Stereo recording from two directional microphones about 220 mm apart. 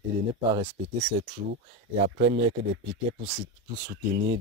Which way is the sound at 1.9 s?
25° right (ahead or behind).